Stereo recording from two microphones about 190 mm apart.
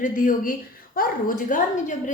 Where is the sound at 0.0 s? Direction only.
45° left (ahead or behind).